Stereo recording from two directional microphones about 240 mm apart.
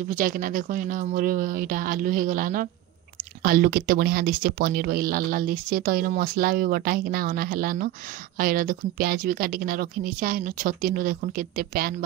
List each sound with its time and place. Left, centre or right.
0.1 s speech: right